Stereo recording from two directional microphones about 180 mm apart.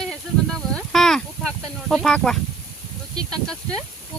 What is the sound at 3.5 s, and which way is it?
Speech, 5° left (ahead or behind).